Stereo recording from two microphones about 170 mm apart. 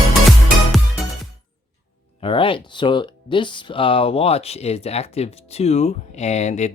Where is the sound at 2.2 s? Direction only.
30° left (ahead or behind).